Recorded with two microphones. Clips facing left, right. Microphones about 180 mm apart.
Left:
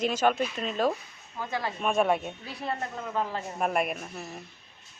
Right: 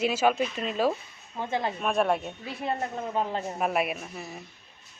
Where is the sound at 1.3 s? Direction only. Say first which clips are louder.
Right 3 dB; 20° right (ahead or behind).